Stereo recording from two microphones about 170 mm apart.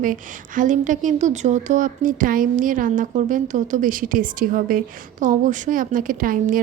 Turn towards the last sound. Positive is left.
turn(degrees=-50)  # may be behind; listen again after turning